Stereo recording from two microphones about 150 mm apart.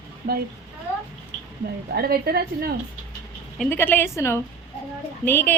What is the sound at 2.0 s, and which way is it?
Speech, 90° right.